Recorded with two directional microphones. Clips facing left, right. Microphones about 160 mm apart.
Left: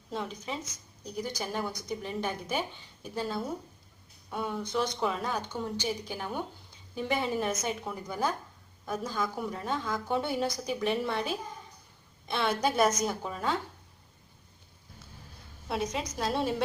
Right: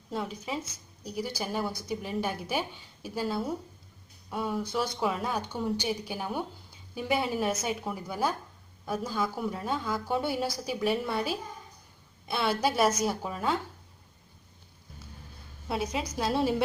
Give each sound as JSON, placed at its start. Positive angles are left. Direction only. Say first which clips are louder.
{"t": 0.1, "sound": "a woman's voice", "louder": "right 2 dB", "side_deg": -5}
{"t": 15.7, "sound": "a woman's voice", "louder": "right 1 dB", "side_deg": -5}